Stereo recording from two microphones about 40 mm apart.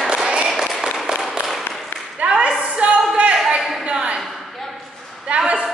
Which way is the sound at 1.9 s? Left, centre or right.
Left.